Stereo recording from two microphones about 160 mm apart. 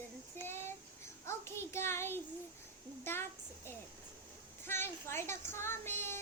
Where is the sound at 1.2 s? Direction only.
15° left (ahead or behind).